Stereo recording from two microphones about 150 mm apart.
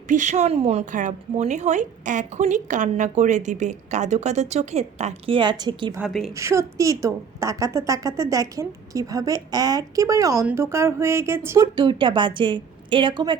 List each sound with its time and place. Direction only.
0.1 s a woman's voice: 55° right (ahead or behind); by 6.0 s 30° right (ahead or behind)
6.0 s a woman's voice: centre (ahead or behind)
6.3 s a woman's voice: 20° right (ahead or behind)
11.8 s a woman's voice: 30° right (ahead or behind)